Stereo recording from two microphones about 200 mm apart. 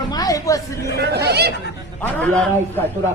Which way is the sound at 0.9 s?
55° right (ahead or behind).